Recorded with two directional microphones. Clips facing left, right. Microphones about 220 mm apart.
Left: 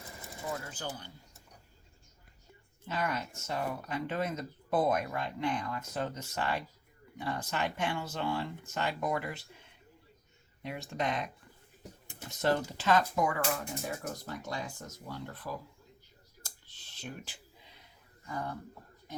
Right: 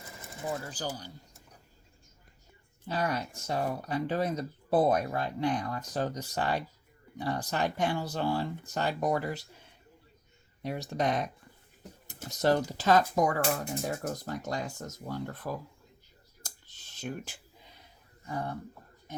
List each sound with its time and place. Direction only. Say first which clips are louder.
0.7 s speech: right 4 dB; 35° right (ahead or behind)
2.8 s speech: right 3 dB; 35° right (ahead or behind)
10.6 s speech: right 4 dB; 40° right (ahead or behind)
16.4 s clicking: right 3 dB; 45° right (ahead or behind)
18.3 s speech: right 3 dB; 30° right (ahead or behind)